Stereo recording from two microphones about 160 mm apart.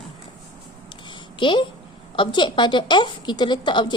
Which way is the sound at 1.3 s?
30° left (ahead or behind).